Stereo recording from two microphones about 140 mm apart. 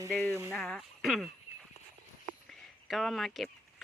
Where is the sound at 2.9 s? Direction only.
Centre (ahead or behind).